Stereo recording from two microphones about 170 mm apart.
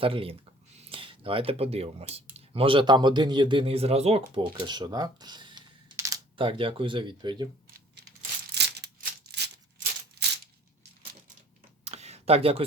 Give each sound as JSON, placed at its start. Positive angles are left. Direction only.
{"t": 0.0, "sound": "speech", "side_deg": -30}
{"t": 8.5, "sound": "rattle", "side_deg": -75}
{"t": 9.2, "sound": "a sound", "side_deg": -70}
{"t": 10.2, "sound": "coin", "side_deg": -75}
{"t": 11.9, "sound": "tick", "side_deg": -40}